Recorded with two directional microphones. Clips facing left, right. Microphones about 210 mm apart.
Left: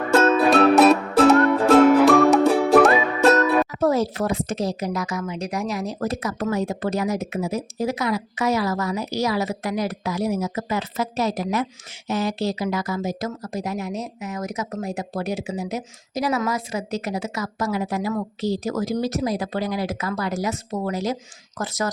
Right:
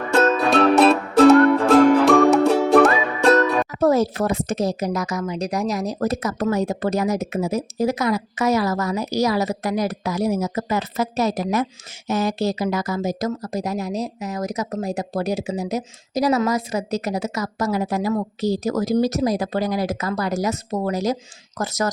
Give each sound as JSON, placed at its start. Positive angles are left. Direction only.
{"t": 0.1, "sound": "music", "side_deg": 5}
{"t": 3.8, "sound": "a woman's voice", "side_deg": -45}